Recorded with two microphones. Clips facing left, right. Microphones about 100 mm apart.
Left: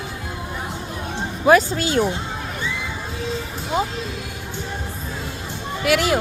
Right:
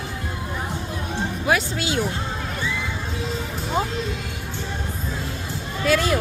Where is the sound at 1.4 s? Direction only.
45° left (ahead or behind).